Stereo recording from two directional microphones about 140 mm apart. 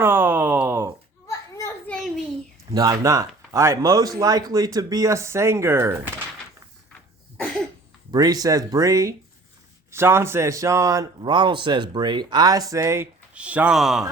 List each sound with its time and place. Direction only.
0.0 s a sound: 15° right (ahead or behind)
1.3 s children playing: 20° left (ahead or behind)
2.7 s a man's voice: 25° right (ahead or behind)
8.1 s a man's voice: 25° right (ahead or behind)
13.3 s speech: 10° right (ahead or behind)